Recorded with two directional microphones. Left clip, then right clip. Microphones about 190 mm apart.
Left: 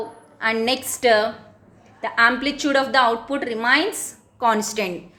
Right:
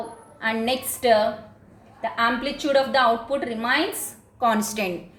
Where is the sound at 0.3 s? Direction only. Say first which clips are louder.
Left 3 dB; 30° left (ahead or behind).